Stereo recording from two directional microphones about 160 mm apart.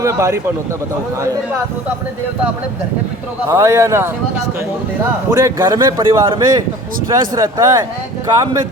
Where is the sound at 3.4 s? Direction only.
15° right (ahead or behind).